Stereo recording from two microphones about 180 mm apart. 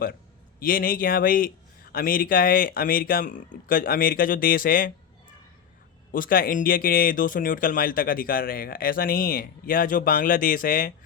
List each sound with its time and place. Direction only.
0.6 s speech: 55° left (ahead or behind)
6.1 s speech: 50° left (ahead or behind)